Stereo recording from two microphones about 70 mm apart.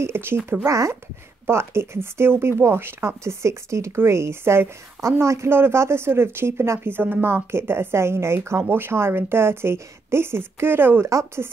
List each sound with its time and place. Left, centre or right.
0.0 s speech: right
0.7 s speech: right
11.1 s speech: right